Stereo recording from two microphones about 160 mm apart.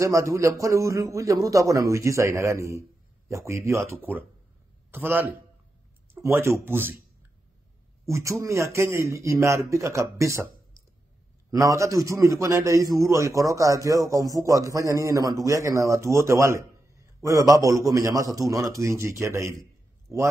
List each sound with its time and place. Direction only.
0.0 s a man's voice: 20° right (ahead or behind)
8.0 s speech: 20° right (ahead or behind)
11.5 s a man's voice: 20° right (ahead or behind)